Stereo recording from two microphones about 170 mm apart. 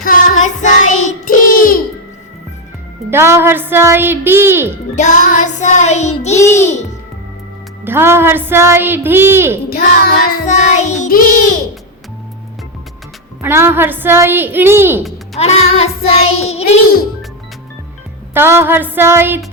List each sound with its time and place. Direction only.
0.0 s child singing: 55° left (ahead or behind)
3.1 s a woman's voice: 15° right (ahead or behind)
4.9 s music: 45° left (ahead or behind)
6.3 s music: 15° left (ahead or behind)
7.9 s a woman's voice: 15° right (ahead or behind)
9.6 s music: 60° left (ahead or behind)
10.4 s music: 45° left (ahead or behind)
13.4 s a woman's voice: 15° right (ahead or behind)
15.4 s child singing: 40° left (ahead or behind)
18.3 s a woman's voice: 15° right (ahead or behind)